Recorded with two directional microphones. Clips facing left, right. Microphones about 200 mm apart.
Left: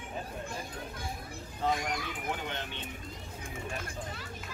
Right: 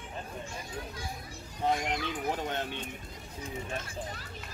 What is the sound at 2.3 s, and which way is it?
Speech, 40° right (ahead or behind).